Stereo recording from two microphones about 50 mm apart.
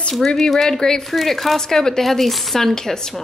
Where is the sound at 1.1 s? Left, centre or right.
Centre.